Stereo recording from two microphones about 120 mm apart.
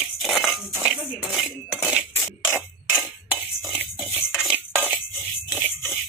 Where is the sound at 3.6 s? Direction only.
5° right (ahead or behind).